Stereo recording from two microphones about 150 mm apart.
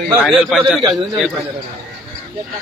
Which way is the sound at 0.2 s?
Centre (ahead or behind).